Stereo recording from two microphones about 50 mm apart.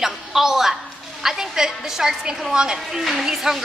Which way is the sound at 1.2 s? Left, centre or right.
Centre.